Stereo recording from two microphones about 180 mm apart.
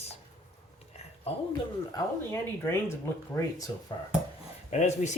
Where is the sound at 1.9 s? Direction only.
15° left (ahead or behind).